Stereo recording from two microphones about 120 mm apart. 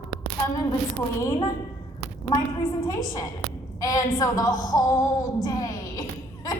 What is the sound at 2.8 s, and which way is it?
A woman's voice, 30° left (ahead or behind).